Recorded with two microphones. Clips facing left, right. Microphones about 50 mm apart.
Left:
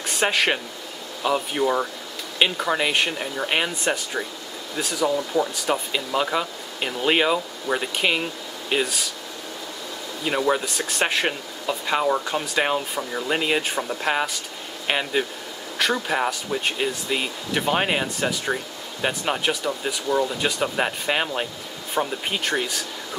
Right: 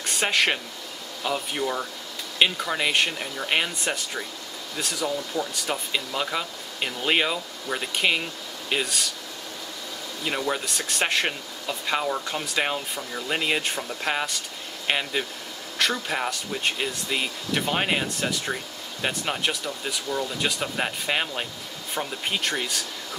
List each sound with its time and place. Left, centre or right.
0.0 s speech: centre
7.3 s speech: centre
7.8 s speech: centre
10.3 s speech: centre
20.1 s speech: centre
20.3 s speech: centre